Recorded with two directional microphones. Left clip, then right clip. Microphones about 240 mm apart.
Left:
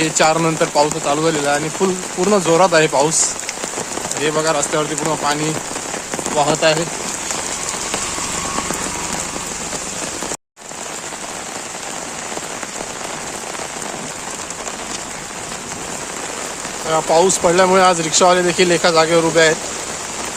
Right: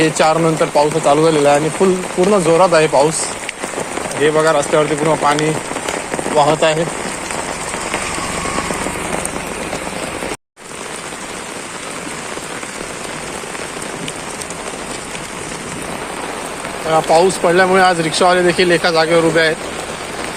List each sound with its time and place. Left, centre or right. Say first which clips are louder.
0.0 s speech: right 2 dB; centre
1.0 s speech: right 6 dB; centre
4.2 s speech: right 5 dB; centre
16.9 s speech: right 2 dB; centre